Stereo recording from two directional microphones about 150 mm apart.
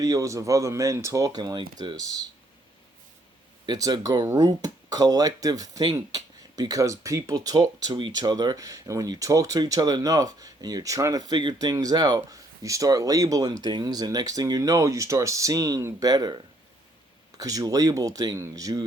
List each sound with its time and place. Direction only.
0.0 s speech: 20° right (ahead or behind)
3.7 s speech: 25° right (ahead or behind)